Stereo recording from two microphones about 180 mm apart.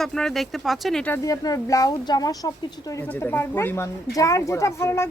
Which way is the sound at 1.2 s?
20° left (ahead or behind).